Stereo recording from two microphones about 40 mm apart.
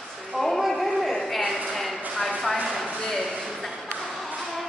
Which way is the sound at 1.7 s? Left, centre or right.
Centre.